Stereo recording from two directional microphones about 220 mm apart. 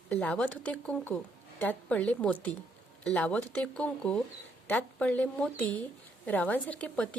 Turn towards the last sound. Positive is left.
turn(degrees=5)  # may be behind; listen again after turning